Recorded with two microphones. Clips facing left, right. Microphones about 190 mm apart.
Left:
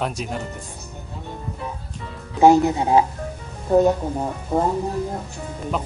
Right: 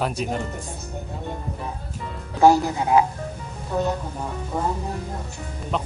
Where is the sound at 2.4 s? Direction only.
20° left (ahead or behind).